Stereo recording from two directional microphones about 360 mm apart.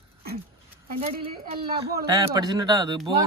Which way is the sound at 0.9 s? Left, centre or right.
Centre.